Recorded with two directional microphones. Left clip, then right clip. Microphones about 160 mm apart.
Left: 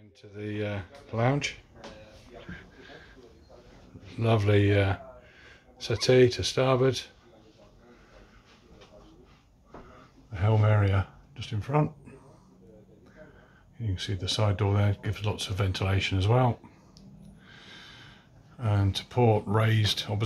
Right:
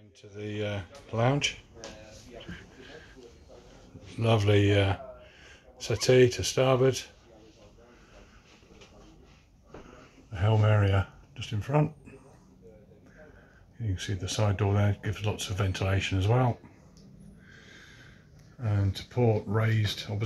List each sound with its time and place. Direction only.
0.2 s speech: 5° left (ahead or behind)
2.4 s a sound: 5° left (ahead or behind)
4.2 s a man's voice: centre (ahead or behind)
10.3 s speech: 5° left (ahead or behind)
13.9 s speech: 5° left (ahead or behind)
17.6 s a sound: 30° left (ahead or behind)
18.6 s speech: 30° left (ahead or behind)